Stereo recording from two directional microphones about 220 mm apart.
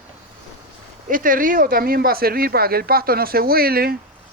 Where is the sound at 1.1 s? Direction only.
40° right (ahead or behind).